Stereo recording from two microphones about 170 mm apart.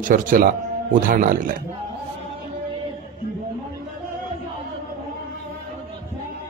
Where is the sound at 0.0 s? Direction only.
55° right (ahead or behind).